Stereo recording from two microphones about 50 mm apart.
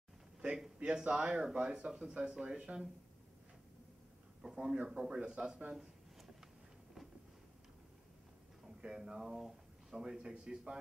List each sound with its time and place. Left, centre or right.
0.4 s a sound: centre
1.0 s a man's voice: right
4.4 s a man's voice: centre
5.7 s a sound: centre
8.8 s speech: centre
10.0 s a man's voice: centre